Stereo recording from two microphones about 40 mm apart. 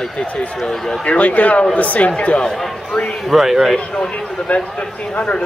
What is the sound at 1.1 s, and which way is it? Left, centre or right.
Speech, left.